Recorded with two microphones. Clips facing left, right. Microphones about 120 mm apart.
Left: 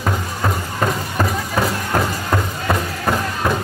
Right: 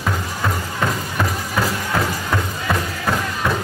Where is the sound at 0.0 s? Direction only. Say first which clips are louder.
Left 2 dB; 25° left (ahead or behind).